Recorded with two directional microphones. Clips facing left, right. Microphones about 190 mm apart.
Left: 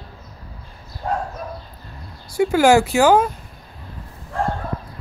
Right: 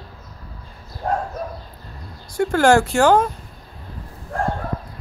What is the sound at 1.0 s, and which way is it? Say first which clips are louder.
Bow-wow: right 1 dB; 50° right (ahead or behind).